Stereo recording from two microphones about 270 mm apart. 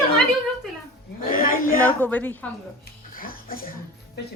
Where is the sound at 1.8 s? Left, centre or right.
Centre.